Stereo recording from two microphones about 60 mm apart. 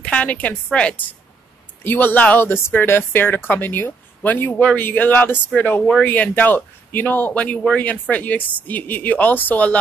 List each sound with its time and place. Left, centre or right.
0.0 s speech: left
1.8 s speech: left